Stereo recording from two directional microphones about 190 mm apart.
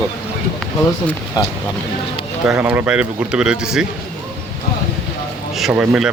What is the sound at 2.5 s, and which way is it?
Speech, 10° right (ahead or behind).